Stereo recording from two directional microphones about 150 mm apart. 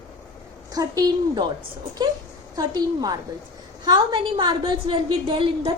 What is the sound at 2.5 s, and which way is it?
A woman's voice, 25° right (ahead or behind).